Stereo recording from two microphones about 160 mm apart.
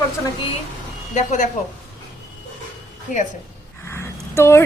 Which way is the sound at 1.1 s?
45° left (ahead or behind).